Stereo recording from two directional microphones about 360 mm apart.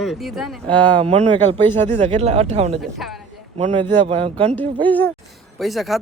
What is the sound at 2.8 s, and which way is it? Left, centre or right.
Speech, centre.